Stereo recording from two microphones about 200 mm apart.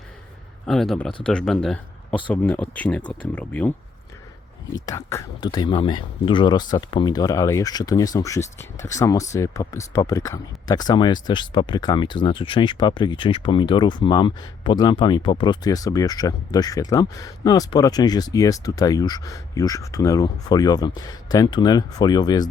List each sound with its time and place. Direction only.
0.7 s speech: centre (ahead or behind)
4.7 s speech: 15° left (ahead or behind)